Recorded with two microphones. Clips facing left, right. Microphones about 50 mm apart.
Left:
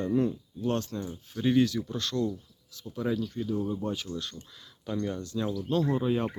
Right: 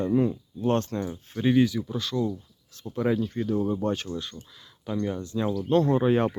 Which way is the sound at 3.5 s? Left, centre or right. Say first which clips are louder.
Right 6 dB; right.